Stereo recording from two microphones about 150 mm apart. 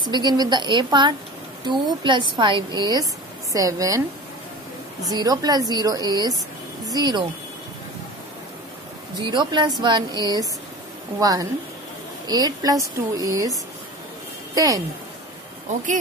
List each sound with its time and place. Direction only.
0.0 s a woman's voice: 30° right (ahead or behind)
5.0 s a woman's voice: 25° right (ahead or behind)
9.2 s a woman's voice: 30° right (ahead or behind)
14.5 s speech: 25° right (ahead or behind)